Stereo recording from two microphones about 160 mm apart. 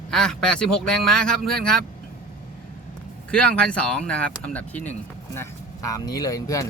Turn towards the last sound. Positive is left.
turn(degrees=20)  # may be behind; listen again after turning